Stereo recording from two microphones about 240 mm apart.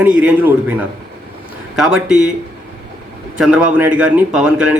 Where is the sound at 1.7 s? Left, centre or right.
Centre.